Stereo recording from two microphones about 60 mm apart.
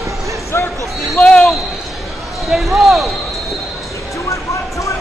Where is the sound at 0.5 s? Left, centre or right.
Left.